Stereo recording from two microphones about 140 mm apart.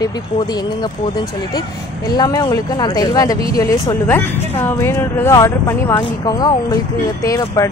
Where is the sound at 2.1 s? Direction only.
30° left (ahead or behind).